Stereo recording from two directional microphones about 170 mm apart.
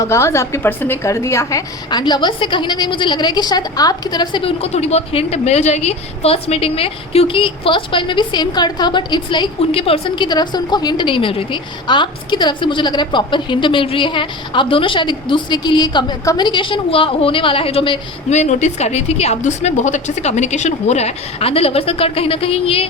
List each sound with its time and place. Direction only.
0.0 s a woman's voice: 15° left (ahead or behind)
18.3 s a woman's voice: 45° left (ahead or behind)